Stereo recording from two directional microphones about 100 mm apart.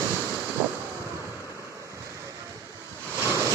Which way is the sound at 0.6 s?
15° right (ahead or behind).